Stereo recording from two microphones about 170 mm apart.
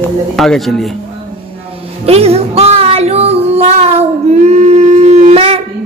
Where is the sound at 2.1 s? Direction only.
35° right (ahead or behind).